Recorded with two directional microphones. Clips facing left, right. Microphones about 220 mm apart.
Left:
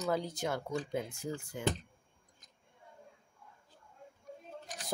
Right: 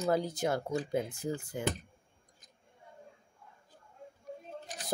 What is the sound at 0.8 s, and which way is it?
Speech, 30° right (ahead or behind).